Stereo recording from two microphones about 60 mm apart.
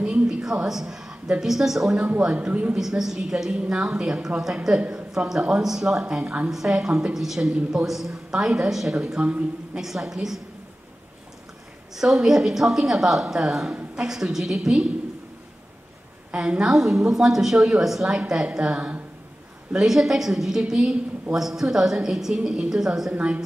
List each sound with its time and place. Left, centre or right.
0.0 s a sound: centre
1.4 s a woman's voice: centre
7.2 s a woman's voice: centre
11.9 s a woman's voice: centre
16.3 s a woman's voice: centre
19.7 s a woman's voice: centre
23.1 s speech: right